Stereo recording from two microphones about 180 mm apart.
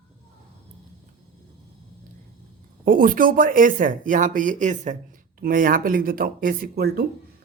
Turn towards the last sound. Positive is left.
turn(degrees=-60)  # may be behind; listen again after turning